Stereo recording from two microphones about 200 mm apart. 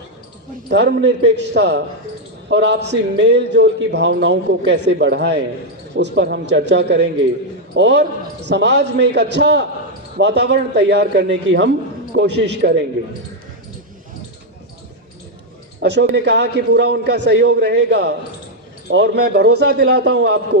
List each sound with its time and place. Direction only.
0.7 s a man's voice: 60° right (ahead or behind)
15.8 s a man's voice: 55° right (ahead or behind)